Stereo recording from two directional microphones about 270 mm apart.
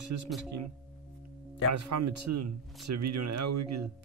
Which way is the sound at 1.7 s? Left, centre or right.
Right.